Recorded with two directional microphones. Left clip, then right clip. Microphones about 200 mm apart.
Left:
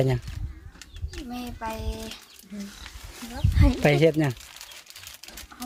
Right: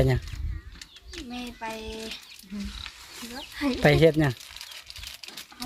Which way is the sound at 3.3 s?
5° right (ahead or behind).